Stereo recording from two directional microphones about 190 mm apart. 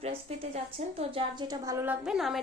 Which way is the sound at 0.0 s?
35° right (ahead or behind).